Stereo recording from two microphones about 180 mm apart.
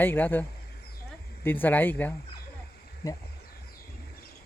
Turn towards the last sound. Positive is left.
turn(degrees=20)  # may be behind; listen again after turning